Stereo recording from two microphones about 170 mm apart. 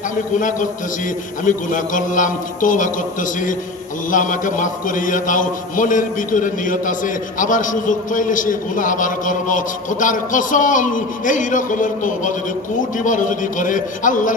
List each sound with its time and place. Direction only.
0.4 s a man's voice: 50° left (ahead or behind)